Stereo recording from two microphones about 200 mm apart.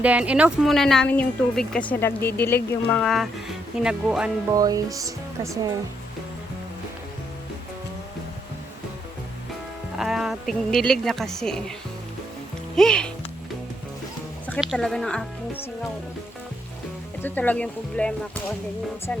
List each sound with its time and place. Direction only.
0.0 s speech: 5° right (ahead or behind)
4.5 s speech: 20° right (ahead or behind)
10.0 s speech: centre (ahead or behind)
12.7 s speech: 5° left (ahead or behind)
14.6 s speech: centre (ahead or behind)
17.2 s speech: 10° left (ahead or behind)